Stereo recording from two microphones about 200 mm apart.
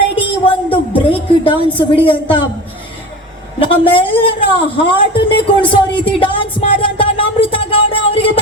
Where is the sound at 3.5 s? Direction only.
25° left (ahead or behind).